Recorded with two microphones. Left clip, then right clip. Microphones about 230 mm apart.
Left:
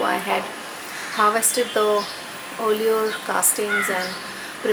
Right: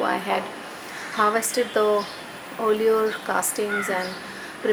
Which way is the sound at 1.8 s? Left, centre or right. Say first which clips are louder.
Left 1 dB; right.